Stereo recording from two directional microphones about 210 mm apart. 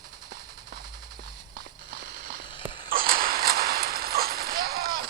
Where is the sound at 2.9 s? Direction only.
45° right (ahead or behind).